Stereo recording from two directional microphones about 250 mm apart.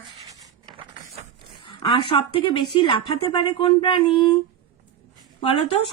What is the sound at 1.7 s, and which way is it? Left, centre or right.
Speech, left.